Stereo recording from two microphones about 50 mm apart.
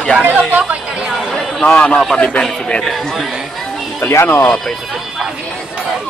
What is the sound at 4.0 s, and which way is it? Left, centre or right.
Speech, left.